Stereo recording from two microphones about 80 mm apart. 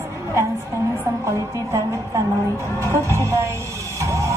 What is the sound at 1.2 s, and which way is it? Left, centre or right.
Music, right.